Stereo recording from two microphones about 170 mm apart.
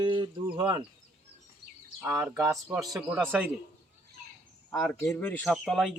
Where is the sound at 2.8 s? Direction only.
Centre (ahead or behind).